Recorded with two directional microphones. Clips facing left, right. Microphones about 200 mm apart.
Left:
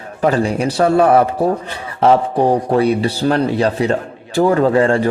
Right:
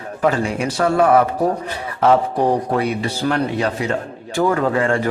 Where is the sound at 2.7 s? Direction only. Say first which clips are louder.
Left 6 dB; 30° left (ahead or behind).